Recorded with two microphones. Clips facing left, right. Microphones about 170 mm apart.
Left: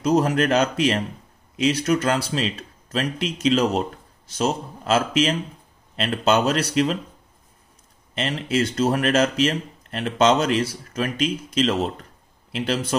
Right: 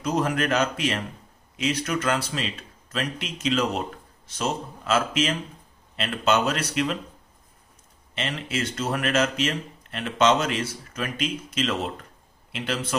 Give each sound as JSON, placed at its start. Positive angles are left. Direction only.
{"t": 0.0, "sound": "speech", "side_deg": 35}
{"t": 8.1, "sound": "speech", "side_deg": 35}